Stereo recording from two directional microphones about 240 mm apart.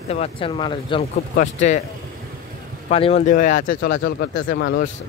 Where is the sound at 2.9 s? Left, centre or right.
Left.